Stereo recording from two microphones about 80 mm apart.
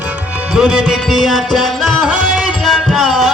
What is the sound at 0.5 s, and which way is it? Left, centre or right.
Music, centre.